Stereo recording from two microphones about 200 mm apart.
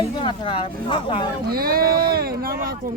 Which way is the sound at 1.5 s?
50° right (ahead or behind).